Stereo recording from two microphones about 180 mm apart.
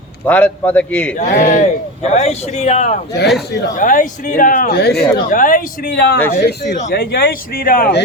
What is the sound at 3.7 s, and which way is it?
Speech, 45° left (ahead or behind).